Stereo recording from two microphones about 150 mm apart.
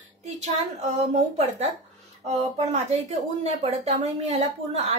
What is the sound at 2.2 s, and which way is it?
Speech, 50° right (ahead or behind).